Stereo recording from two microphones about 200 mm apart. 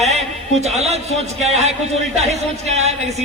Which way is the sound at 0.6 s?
35° right (ahead or behind).